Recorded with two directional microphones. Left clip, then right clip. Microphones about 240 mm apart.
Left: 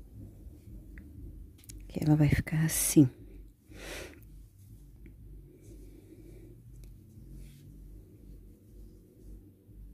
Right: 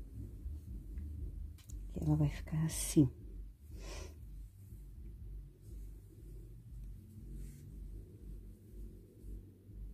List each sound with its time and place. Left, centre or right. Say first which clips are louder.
1.7 s speech: left 9 dB; left
3.7 s snort: left 9 dB; left